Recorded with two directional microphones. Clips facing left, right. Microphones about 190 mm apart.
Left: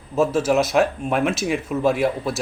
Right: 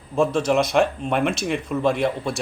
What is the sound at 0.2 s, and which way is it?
Speech, 5° left (ahead or behind).